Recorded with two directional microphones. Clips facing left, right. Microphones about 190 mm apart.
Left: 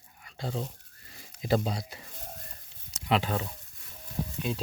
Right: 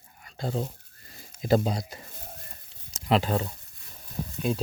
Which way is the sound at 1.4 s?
45° right (ahead or behind).